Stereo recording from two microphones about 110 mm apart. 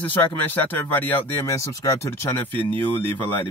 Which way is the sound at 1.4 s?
30° left (ahead or behind).